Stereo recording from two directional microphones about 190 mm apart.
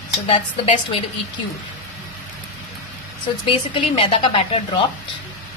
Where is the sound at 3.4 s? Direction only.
30° left (ahead or behind).